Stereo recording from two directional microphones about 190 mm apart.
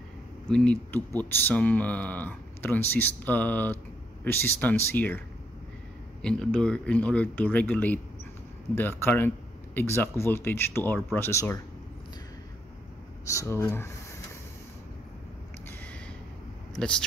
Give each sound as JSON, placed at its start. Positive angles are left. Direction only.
{"t": 0.5, "sound": "speech", "side_deg": 5}
{"t": 6.2, "sound": "speech", "side_deg": 5}
{"t": 13.2, "sound": "speech", "side_deg": 15}
{"t": 16.7, "sound": "speech", "side_deg": 5}